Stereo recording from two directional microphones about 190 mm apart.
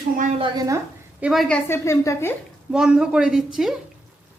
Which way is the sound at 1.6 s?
15° left (ahead or behind).